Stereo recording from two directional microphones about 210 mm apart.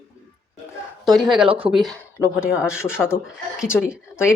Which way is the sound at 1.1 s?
Centre (ahead or behind).